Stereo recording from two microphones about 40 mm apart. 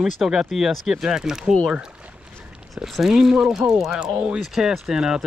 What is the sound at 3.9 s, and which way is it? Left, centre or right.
Speech, right.